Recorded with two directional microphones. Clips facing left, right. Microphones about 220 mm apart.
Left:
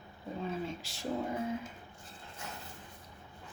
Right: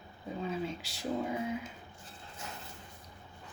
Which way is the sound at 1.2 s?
5° right (ahead or behind).